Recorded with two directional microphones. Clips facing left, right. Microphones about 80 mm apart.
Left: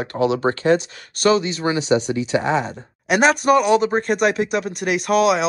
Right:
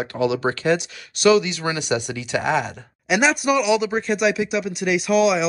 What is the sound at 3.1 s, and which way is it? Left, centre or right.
Speech, left.